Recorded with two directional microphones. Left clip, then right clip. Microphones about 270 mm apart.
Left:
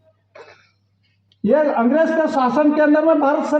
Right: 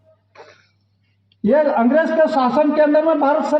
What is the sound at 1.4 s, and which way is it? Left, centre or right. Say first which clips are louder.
A man's voice: right 1 dB; right.